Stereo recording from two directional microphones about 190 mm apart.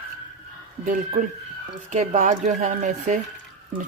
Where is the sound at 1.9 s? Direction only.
40° right (ahead or behind).